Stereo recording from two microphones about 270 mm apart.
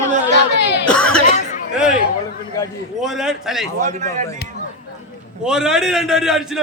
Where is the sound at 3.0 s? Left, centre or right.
Centre.